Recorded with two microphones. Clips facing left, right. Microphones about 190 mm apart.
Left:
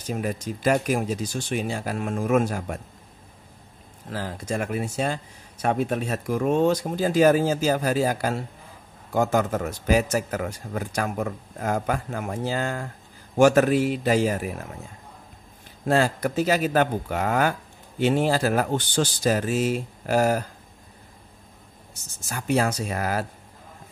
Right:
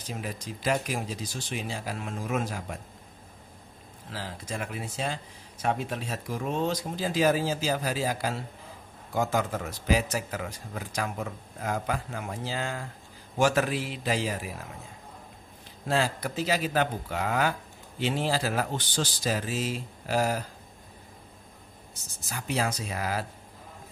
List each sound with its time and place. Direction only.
0.1 s speech: 50° left (ahead or behind)
4.1 s speech: 45° left (ahead or behind)
15.9 s speech: 45° left (ahead or behind)
22.3 s speech: 50° left (ahead or behind)